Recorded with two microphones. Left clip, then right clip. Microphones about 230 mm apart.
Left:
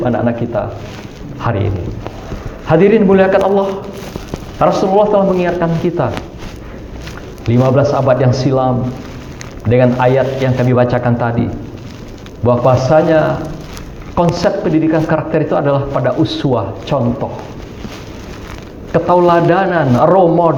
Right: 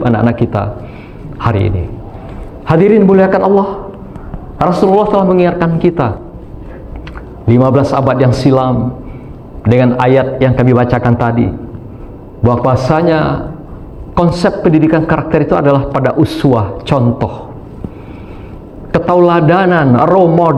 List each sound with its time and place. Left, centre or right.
0.0 s a man's voice: right
7.5 s a man's voice: right
18.9 s a man's voice: right